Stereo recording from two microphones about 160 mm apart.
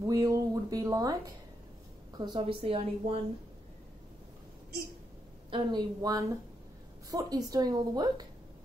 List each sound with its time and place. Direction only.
0.0 s a woman's voice: 20° right (ahead or behind); by 3.2 s 35° right (ahead or behind)
5.5 s a woman's voice: 25° right (ahead or behind)